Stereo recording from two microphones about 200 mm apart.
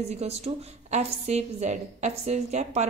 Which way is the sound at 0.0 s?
30° right (ahead or behind).